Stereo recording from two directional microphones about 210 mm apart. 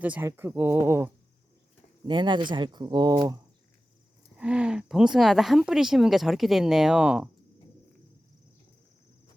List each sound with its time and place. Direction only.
0.0 s speech: 10° right (ahead or behind)
2.0 s speech: 20° right (ahead or behind)
4.4 s speech: 5° right (ahead or behind)